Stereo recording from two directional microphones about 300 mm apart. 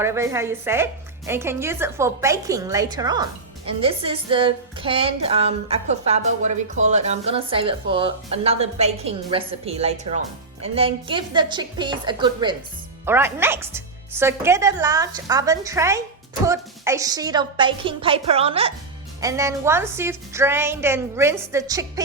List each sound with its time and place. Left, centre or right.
0.0 s speech: centre